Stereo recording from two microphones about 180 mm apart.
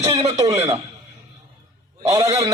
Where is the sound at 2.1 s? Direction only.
20° right (ahead or behind).